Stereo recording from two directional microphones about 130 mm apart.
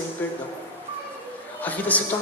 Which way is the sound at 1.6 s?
10° left (ahead or behind).